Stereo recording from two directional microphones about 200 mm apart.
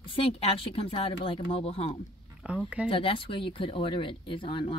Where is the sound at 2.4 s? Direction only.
5° right (ahead or behind).